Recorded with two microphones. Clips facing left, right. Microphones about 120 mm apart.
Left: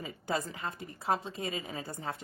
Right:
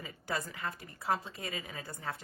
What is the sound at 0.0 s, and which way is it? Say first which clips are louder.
A woman's voice: left 4 dB; 20° left (ahead or behind).